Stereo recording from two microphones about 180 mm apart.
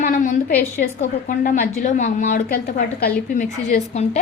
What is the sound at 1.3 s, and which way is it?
A woman's voice, 50° left (ahead or behind).